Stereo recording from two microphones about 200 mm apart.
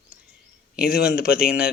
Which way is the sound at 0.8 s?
50° left (ahead or behind).